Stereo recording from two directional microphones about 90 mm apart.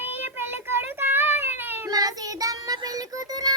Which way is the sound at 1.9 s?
45° right (ahead or behind).